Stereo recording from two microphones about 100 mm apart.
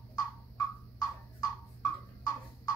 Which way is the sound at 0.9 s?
40° left (ahead or behind).